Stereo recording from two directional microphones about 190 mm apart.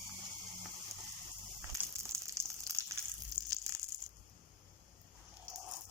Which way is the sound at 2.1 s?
15° right (ahead or behind).